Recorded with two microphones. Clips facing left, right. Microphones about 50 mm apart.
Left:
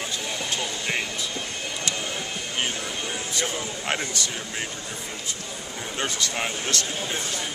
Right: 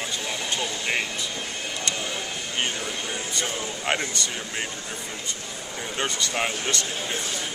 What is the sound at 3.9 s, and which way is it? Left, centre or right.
Speech, centre.